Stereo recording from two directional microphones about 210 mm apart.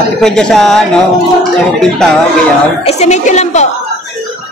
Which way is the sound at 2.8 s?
30° left (ahead or behind).